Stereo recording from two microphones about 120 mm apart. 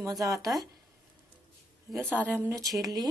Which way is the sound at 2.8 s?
35° right (ahead or behind).